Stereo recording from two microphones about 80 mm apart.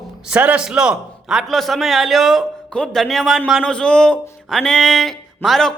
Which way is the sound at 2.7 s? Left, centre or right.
Centre.